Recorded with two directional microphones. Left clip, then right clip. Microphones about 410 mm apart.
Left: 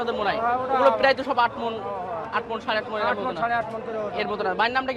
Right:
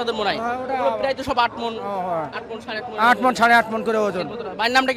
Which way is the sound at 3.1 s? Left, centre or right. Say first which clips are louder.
Right 13 dB; right.